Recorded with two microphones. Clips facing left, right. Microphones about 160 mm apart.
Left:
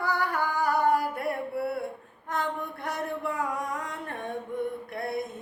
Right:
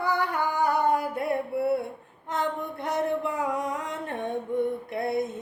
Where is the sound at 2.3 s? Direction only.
20° right (ahead or behind).